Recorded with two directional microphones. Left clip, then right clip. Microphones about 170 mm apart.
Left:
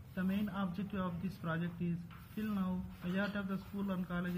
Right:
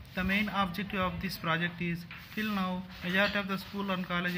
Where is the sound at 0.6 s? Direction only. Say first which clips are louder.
Right 10 dB; 30° right (ahead or behind).